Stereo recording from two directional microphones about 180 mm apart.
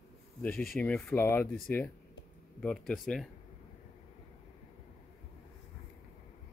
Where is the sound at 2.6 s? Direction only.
Centre (ahead or behind).